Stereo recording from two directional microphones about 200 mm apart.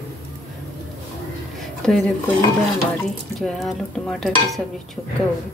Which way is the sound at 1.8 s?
5° left (ahead or behind).